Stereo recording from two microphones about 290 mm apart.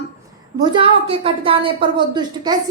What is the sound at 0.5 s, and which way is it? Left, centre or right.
A woman's voice, centre.